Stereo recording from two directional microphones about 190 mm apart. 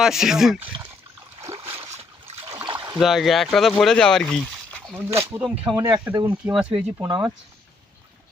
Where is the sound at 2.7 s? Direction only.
25° right (ahead or behind).